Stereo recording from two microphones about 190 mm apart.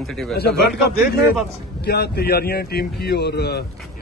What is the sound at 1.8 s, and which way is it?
A man's voice, 55° left (ahead or behind).